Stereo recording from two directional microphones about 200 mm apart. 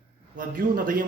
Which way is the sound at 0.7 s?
45° right (ahead or behind).